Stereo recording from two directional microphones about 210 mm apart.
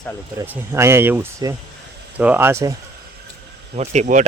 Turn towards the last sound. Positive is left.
turn(degrees=-35)  # may be behind; listen again after turning